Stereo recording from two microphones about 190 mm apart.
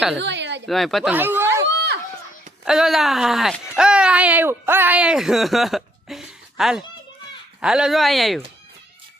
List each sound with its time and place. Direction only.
0.2 s speech: 65° right (ahead or behind)
0.7 s speech: centre (ahead or behind)
1.6 s a sound: 65° right (ahead or behind)
2.6 s speech: centre (ahead or behind)